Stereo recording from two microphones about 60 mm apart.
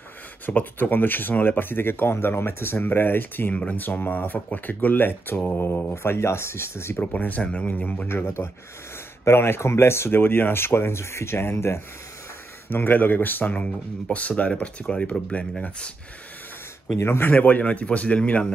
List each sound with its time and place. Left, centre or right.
0.5 s speech: left
7.0 s a man's voice: left
8.1 s a man's voice: left; by 15.4 s centre
17.0 s a man's voice: left